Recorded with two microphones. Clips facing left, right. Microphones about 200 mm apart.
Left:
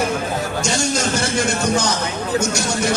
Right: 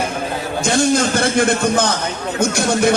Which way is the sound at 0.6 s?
55° right (ahead or behind).